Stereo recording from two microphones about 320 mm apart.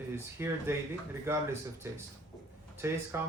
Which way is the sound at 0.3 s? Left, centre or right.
Centre.